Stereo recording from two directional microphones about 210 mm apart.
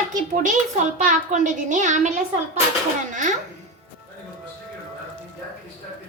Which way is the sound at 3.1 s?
35° right (ahead or behind).